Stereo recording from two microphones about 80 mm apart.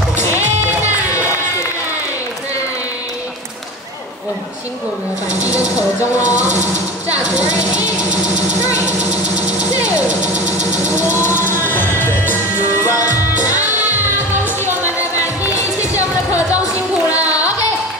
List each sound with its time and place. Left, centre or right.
6.1 s speech: left
8.6 s speech: left
11.3 s music: right
12.0 s music: left
12.8 s music: left
13.6 s music: right